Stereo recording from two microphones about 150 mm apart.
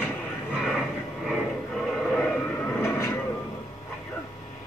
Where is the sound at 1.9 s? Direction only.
5° left (ahead or behind).